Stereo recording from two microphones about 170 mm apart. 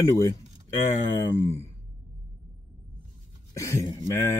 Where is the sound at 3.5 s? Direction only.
15° left (ahead or behind).